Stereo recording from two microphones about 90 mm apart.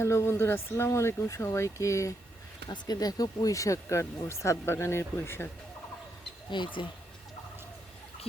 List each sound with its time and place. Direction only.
0.0 s speech: 30° left (ahead or behind)
2.6 s speech: 45° left (ahead or behind); by 5.5 s 30° left (ahead or behind)
6.5 s speech: 65° left (ahead or behind)